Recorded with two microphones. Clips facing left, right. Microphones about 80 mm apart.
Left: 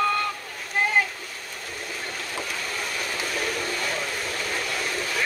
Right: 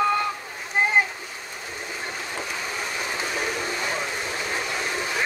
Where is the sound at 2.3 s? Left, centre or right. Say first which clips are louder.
Even; centre.